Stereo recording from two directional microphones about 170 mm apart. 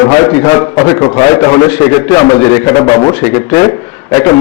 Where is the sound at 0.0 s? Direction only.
20° left (ahead or behind).